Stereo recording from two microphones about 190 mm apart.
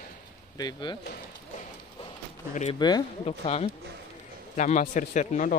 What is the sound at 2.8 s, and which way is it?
Speech, 20° left (ahead or behind).